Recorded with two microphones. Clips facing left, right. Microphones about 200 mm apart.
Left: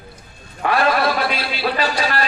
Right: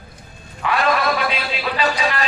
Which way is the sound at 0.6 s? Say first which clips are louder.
Left 2 dB; 35° left (ahead or behind).